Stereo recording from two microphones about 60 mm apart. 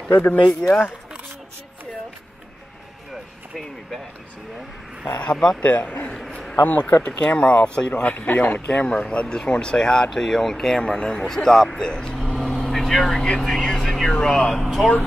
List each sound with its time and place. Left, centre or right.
0.1 s a man's voice: left
0.5 s speech: centre
5.2 s a man's voice: centre
6.1 s a sound: centre
6.6 s speech: left; by 12.2 s centre
12.4 s vehicle: centre
14.1 s speech: centre